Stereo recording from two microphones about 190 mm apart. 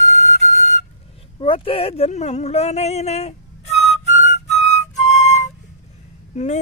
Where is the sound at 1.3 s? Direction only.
30° left (ahead or behind).